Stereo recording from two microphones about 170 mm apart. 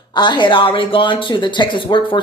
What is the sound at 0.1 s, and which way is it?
Speech, 25° left (ahead or behind).